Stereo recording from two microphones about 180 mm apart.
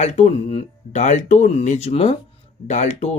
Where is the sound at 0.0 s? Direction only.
35° left (ahead or behind).